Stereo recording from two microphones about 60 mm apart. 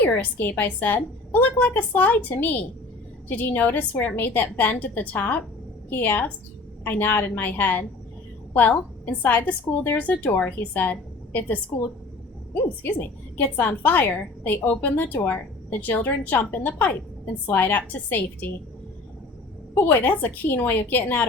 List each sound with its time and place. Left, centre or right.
0.0 s a woman's voice: left
12.8 s a woman's voice: left
19.7 s a woman's voice: left